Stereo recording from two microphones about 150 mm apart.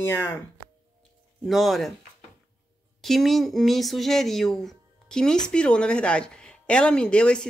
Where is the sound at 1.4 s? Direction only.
Centre (ahead or behind).